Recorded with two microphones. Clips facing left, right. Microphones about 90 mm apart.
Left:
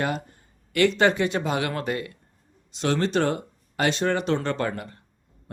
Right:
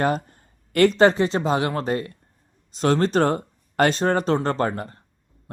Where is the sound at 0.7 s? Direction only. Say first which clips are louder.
Right 4 dB; 40° right (ahead or behind).